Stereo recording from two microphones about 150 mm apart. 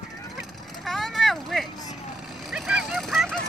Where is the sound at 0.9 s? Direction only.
Centre (ahead or behind).